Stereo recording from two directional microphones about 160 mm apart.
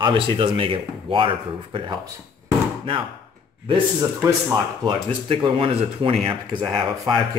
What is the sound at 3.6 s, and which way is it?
Speech, 25° right (ahead or behind).